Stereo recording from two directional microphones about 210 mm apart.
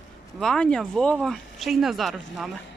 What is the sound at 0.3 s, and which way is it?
Speech, 5° left (ahead or behind).